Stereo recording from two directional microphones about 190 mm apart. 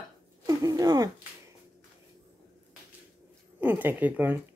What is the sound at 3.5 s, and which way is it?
Speech, 10° right (ahead or behind).